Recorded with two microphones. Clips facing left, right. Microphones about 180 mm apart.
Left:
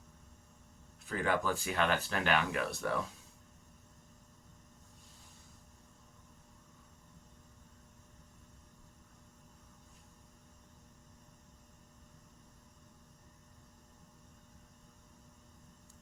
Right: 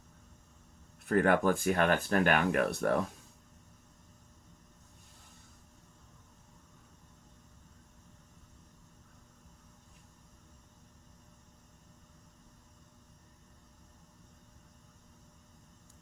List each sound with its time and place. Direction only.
1.0 s speech: 55° right (ahead or behind)